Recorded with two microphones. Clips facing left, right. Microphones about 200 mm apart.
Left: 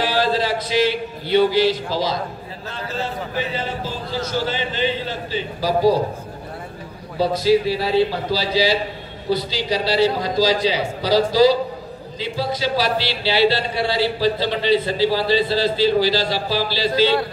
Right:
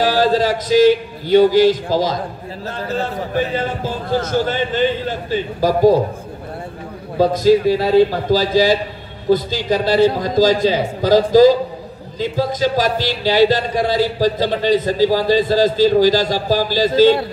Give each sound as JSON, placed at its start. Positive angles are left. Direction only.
{"t": 0.0, "sound": "a man's voice", "side_deg": -45}
{"t": 3.3, "sound": "speech", "side_deg": -50}
{"t": 7.2, "sound": "speech", "side_deg": -45}